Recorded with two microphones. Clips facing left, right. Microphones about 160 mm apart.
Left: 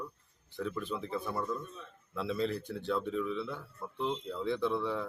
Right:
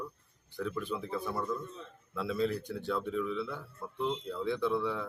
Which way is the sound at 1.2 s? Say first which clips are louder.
Right 1 dB; 5° left (ahead or behind).